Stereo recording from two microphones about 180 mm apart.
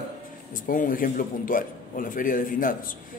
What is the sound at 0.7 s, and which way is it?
A man's voice, 50° left (ahead or behind).